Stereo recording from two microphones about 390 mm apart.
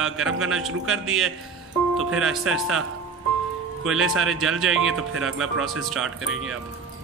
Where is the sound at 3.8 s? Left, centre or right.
Centre.